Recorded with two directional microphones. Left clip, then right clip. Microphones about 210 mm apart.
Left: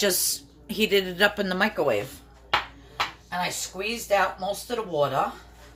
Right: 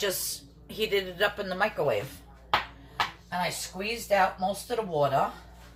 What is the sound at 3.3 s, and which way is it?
Speech, 45° left (ahead or behind).